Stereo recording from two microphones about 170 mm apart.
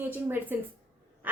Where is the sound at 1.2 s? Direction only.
10° right (ahead or behind).